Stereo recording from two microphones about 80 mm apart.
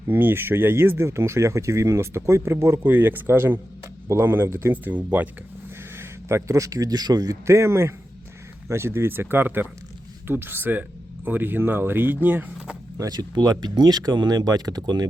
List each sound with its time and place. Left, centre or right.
0.1 s speech: right
6.0 s speech: right
7.4 s speech: right
13.0 s speech: right